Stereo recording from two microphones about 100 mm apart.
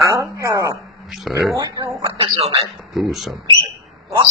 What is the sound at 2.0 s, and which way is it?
Speech, 50° right (ahead or behind).